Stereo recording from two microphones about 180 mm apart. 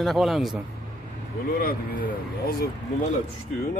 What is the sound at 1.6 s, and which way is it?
Speech, 55° left (ahead or behind).